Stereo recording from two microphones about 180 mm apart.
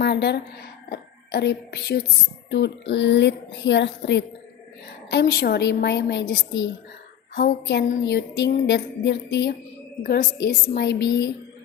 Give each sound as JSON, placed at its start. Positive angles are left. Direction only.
{"t": 0.0, "sound": "a woman's voice", "side_deg": 65}
{"t": 5.1, "sound": "a woman's voice", "side_deg": 65}
{"t": 10.0, "sound": "a woman's voice", "side_deg": 55}